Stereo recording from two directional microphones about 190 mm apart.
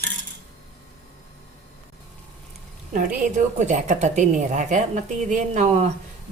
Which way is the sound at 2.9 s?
45° right (ahead or behind).